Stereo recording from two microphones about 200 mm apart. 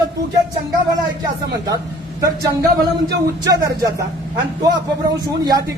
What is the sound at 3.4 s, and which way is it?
Speech, 15° right (ahead or behind).